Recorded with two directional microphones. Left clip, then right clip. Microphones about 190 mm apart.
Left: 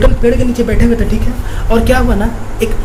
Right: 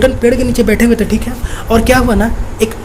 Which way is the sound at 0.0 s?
50° right (ahead or behind).